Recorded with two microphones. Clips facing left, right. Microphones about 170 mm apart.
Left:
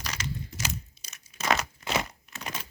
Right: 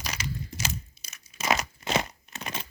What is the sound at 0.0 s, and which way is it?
Crushing, 10° right (ahead or behind).